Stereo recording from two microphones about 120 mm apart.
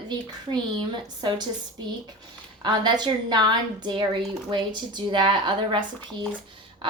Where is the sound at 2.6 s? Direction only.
40° right (ahead or behind).